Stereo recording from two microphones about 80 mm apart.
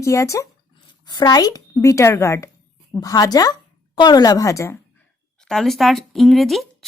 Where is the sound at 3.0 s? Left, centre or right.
Left.